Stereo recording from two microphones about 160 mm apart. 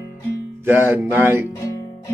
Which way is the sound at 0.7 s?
10° right (ahead or behind).